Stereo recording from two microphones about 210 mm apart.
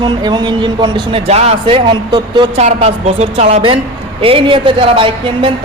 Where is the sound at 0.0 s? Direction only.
20° right (ahead or behind).